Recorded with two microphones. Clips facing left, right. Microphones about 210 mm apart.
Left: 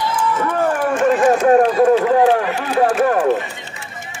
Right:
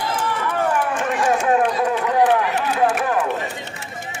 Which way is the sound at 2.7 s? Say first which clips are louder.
Left 6 dB; 45° left (ahead or behind).